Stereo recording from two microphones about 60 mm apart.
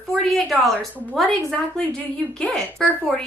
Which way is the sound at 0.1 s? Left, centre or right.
Centre.